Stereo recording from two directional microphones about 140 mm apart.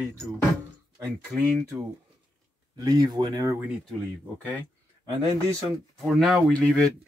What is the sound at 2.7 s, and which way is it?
Speech, 25° right (ahead or behind).